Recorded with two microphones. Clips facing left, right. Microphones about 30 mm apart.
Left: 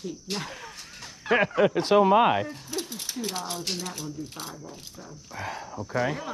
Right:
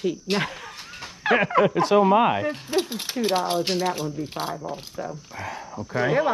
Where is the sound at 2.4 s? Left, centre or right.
Right.